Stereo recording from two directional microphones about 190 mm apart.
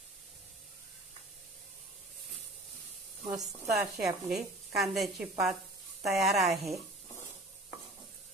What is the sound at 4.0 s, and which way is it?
A woman's voice, 5° right (ahead or behind).